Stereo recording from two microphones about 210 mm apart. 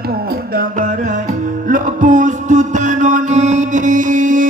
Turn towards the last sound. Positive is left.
turn(degrees=-40)  # may be behind; listen again after turning